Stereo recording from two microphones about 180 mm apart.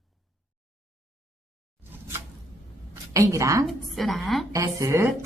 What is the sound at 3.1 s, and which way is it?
Speech, 15° right (ahead or behind).